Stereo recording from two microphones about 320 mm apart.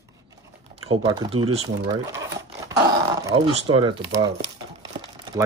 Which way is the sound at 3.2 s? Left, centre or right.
Centre.